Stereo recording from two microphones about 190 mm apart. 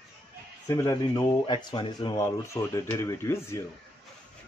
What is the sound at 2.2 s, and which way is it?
Speech, 15° left (ahead or behind).